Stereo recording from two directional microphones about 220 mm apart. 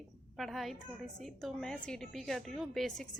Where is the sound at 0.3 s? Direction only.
Centre (ahead or behind).